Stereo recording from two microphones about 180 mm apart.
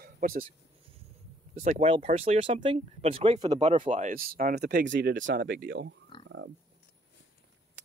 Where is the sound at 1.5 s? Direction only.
40° right (ahead or behind).